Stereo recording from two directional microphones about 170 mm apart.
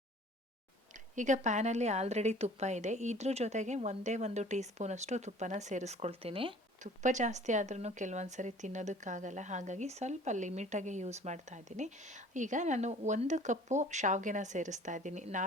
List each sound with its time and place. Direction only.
1.1 s a woman's voice: 45° right (ahead or behind)
6.8 s a woman's voice: 45° right (ahead or behind)